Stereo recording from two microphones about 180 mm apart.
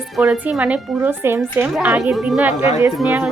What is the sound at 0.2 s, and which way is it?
Speech, 5° right (ahead or behind).